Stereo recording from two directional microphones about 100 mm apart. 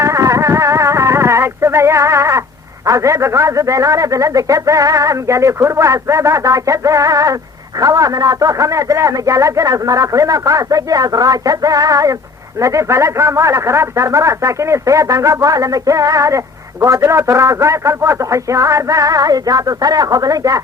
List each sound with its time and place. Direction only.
0.0 s vehicle: 30° right (ahead or behind)
2.8 s a man's voice: 30° right (ahead or behind)